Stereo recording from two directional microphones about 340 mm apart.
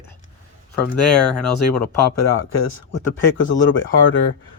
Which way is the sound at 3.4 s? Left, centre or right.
Left.